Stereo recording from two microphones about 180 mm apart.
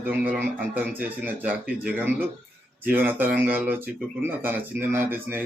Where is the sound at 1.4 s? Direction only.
5° right (ahead or behind).